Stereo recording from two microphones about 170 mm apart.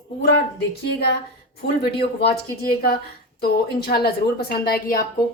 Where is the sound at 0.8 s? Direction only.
85° left.